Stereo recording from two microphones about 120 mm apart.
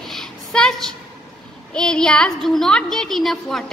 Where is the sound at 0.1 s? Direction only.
5° left (ahead or behind).